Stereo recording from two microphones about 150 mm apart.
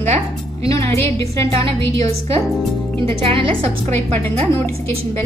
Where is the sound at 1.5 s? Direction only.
40° right (ahead or behind).